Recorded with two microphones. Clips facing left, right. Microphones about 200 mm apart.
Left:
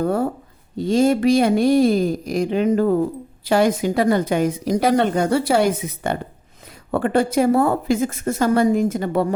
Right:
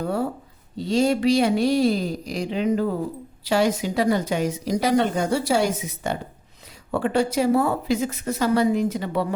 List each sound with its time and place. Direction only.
0.0 s a woman's voice: 50° left (ahead or behind)